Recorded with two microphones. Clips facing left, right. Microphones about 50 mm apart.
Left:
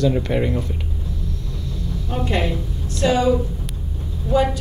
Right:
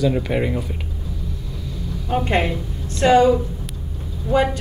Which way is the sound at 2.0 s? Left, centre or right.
Right.